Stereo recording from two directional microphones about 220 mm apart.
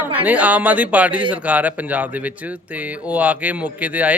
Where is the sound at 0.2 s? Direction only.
5° right (ahead or behind).